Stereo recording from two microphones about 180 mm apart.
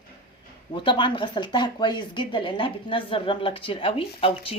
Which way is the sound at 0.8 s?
25° left (ahead or behind).